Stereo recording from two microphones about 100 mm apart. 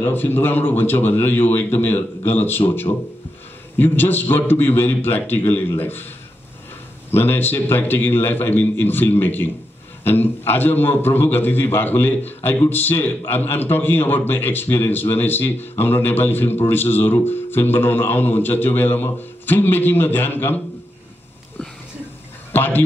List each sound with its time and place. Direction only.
0.0 s speech: 20° left (ahead or behind)
7.1 s speech: 20° left (ahead or behind)
22.5 s speech: 20° left (ahead or behind)